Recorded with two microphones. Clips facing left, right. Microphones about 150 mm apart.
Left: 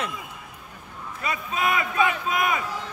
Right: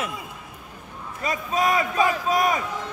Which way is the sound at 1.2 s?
35° right (ahead or behind).